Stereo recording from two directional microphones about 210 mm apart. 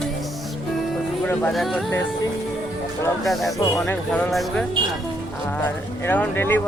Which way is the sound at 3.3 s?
Centre (ahead or behind).